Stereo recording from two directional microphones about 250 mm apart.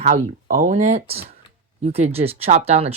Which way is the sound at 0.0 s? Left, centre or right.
Right.